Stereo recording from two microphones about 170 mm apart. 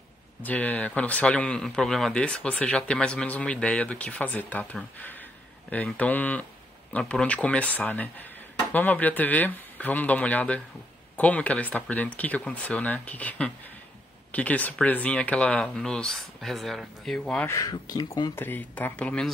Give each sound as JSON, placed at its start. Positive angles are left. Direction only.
{"t": 0.4, "sound": "a man's voice", "side_deg": 10}
{"t": 17.5, "sound": "speech", "side_deg": 20}
{"t": 18.4, "sound": "a man's voice", "side_deg": 10}